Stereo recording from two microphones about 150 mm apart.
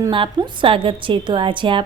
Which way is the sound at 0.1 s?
35° right (ahead or behind).